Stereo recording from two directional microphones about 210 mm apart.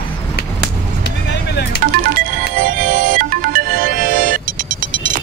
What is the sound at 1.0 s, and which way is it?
Vehicle, 55° left (ahead or behind).